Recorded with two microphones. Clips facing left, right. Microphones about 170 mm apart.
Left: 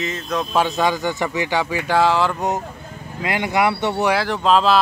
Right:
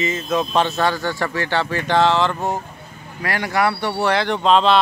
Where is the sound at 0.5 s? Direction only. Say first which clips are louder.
Left 3 dB; 10° left (ahead or behind).